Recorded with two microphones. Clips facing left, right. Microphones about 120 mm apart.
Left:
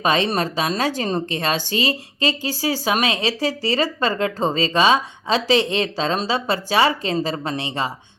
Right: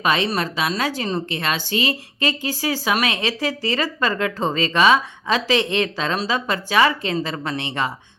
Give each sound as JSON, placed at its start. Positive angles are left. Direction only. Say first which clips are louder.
{"t": 0.0, "sound": "speech", "louder": "left 1 dB", "side_deg": 35}